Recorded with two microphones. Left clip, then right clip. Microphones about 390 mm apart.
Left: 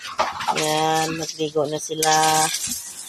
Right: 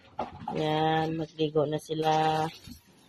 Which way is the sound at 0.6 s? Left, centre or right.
Right.